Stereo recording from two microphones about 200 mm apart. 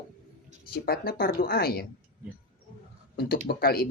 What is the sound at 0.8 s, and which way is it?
A woman's voice, 50° left (ahead or behind).